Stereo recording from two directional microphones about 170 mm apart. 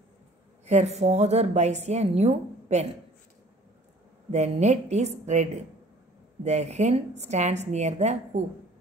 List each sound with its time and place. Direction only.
0.7 s a woman's voice: 40° right (ahead or behind)
4.3 s a woman's voice: 40° right (ahead or behind)